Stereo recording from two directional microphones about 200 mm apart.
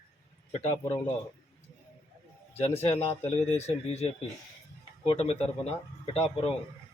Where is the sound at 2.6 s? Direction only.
30° left (ahead or behind).